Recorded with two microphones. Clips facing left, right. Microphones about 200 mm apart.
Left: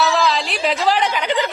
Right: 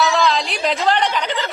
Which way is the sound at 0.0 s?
Centre (ahead or behind).